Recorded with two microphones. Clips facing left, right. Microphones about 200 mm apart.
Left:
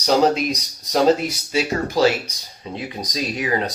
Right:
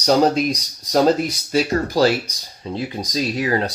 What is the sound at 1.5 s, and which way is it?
Speech, 40° right (ahead or behind).